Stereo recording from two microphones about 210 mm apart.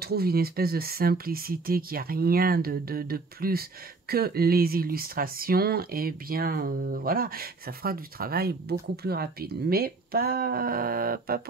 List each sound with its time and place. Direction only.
0.0 s speech: 45° right (ahead or behind)